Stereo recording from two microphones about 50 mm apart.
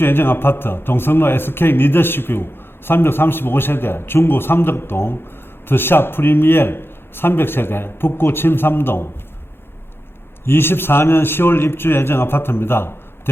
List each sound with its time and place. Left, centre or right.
0.0 s a man's voice: left
10.4 s a man's voice: left